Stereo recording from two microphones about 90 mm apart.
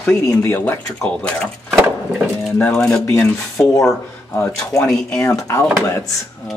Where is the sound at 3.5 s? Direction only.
40° left (ahead or behind).